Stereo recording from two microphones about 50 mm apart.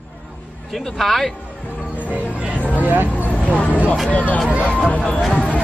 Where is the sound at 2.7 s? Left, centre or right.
Right.